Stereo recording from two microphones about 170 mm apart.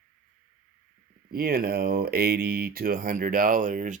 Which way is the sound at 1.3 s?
60° right (ahead or behind).